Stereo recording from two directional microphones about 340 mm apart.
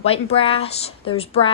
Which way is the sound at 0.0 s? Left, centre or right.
Centre.